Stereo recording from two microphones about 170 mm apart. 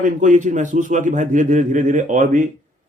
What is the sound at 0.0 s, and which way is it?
A man's voice, 50° right (ahead or behind).